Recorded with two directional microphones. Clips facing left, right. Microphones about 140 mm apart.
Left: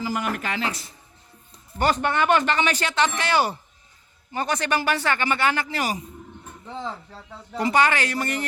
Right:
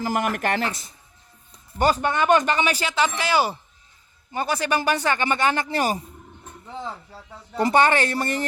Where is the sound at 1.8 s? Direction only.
10° right (ahead or behind).